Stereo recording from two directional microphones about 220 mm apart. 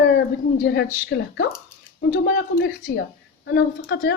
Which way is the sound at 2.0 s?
45° left (ahead or behind).